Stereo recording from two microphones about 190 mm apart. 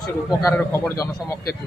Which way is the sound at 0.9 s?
20° left (ahead or behind).